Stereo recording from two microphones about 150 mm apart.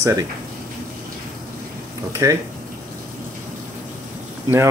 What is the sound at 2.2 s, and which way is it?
Speech, 20° right (ahead or behind).